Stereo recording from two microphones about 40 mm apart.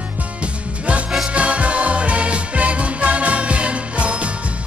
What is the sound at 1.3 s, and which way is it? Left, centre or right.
Music, right.